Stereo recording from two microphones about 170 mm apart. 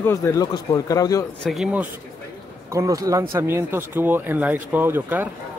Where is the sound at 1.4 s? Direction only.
Centre (ahead or behind).